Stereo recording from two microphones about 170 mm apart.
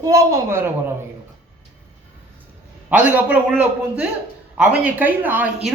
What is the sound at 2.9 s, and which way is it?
Speech, 10° right (ahead or behind).